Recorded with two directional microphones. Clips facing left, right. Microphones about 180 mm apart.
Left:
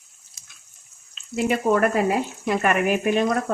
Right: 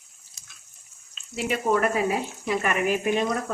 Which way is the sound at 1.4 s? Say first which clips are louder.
Left 4 dB; 55° left (ahead or behind).